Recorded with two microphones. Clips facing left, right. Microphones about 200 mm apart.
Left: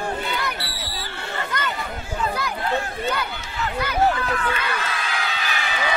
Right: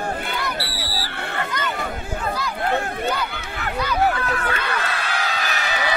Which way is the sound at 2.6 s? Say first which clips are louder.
Right 3 dB; 55° right (ahead or behind).